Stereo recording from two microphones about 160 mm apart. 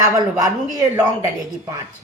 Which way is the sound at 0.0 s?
20° right (ahead or behind).